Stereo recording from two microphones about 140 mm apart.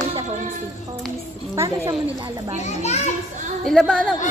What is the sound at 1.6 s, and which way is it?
Speech, 25° right (ahead or behind).